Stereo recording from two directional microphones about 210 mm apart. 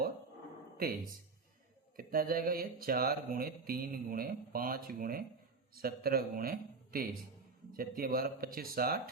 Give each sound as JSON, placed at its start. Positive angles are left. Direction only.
{"t": 0.8, "sound": "mantra", "side_deg": -40}